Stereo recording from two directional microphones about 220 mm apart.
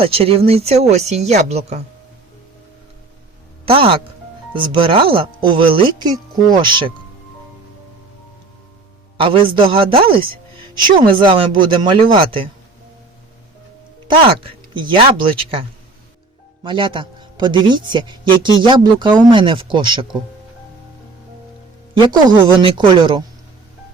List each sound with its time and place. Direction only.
0.0 s a man's voice: 25° right (ahead or behind)
3.7 s a man's voice: 25° right (ahead or behind)
9.1 s a man's voice: 25° right (ahead or behind)
14.1 s a man's voice: 25° right (ahead or behind)
16.6 s a man's voice: 20° right (ahead or behind)
22.1 s a man's voice: 20° right (ahead or behind)